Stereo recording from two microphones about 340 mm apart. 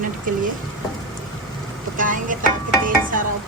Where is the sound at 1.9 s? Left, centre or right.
Right.